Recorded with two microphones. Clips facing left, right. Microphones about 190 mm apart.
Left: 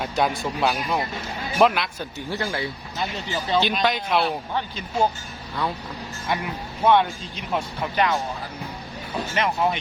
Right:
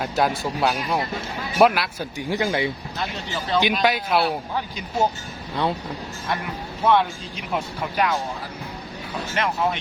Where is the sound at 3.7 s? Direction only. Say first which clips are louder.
Right 2 dB; 5° right (ahead or behind).